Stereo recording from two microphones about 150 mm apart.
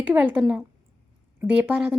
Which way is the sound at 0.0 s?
10° right (ahead or behind).